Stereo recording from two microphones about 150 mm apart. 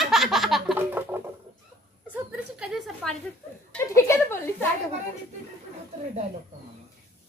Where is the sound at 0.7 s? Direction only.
15° right (ahead or behind).